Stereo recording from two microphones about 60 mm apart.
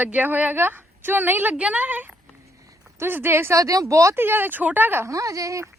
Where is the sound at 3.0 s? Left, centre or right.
Right.